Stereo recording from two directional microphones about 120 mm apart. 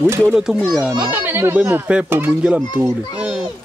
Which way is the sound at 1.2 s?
20° right (ahead or behind).